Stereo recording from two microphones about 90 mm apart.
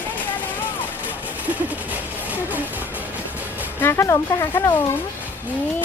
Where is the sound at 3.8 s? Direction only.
30° left (ahead or behind).